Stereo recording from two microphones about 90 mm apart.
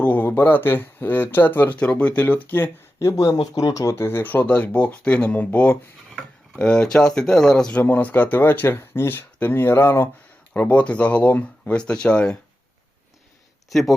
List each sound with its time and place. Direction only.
0.0 s speech: 20° left (ahead or behind)
3.0 s speech: 35° left (ahead or behind); by 7.8 s 5° left (ahead or behind)
7.8 s speech: 20° left (ahead or behind)
10.5 s speech: 15° left (ahead or behind)
13.7 s speech: centre (ahead or behind)